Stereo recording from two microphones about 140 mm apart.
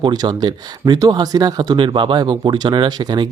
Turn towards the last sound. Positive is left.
turn(degrees=-30)  # may be behind; listen again after turning